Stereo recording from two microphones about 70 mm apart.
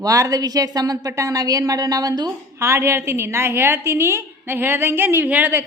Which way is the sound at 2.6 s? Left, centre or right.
Right.